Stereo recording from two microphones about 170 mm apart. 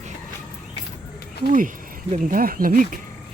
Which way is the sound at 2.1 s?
55° right (ahead or behind).